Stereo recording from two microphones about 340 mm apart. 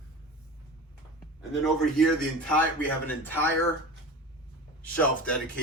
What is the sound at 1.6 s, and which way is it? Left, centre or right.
Speech, centre.